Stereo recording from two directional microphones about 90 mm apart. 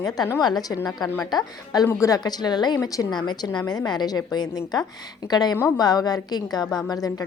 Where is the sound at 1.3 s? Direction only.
45° left (ahead or behind).